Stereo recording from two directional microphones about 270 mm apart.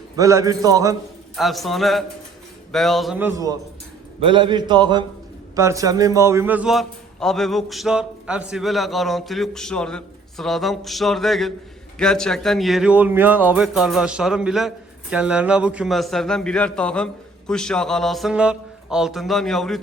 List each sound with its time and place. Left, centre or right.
0.2 s speech: centre
1.4 s a man's voice: centre